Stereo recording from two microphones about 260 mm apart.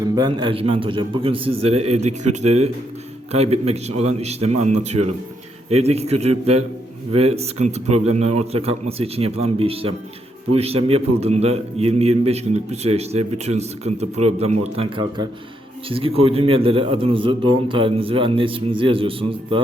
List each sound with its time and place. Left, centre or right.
0.2 s a man's voice: centre